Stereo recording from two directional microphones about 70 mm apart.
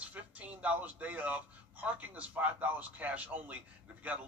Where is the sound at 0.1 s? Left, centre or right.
Right.